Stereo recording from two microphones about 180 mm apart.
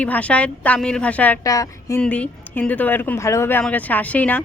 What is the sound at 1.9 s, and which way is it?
A woman's voice, 5° left (ahead or behind).